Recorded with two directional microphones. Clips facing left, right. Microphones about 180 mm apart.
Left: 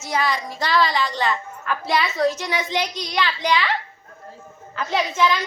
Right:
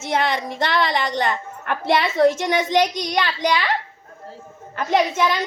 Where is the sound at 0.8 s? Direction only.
20° right (ahead or behind).